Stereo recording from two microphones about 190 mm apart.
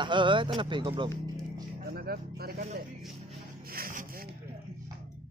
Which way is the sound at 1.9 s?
55° right (ahead or behind).